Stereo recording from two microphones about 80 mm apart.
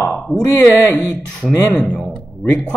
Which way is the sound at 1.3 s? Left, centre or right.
Centre.